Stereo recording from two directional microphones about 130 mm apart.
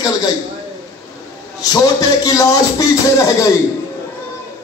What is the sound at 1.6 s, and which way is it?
Speech, 25° left (ahead or behind).